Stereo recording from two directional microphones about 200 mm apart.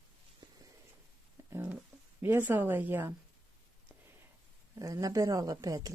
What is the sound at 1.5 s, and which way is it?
Speech, 10° right (ahead or behind).